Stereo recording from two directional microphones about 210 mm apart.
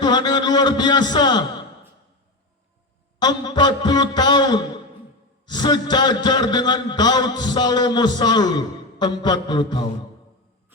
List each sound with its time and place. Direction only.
0.0 s a man's voice: 20° left (ahead or behind)
3.2 s a man's voice: 20° left (ahead or behind)